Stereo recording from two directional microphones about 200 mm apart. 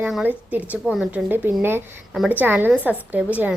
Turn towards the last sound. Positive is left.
turn(degrees=-10)  # may be behind; listen again after turning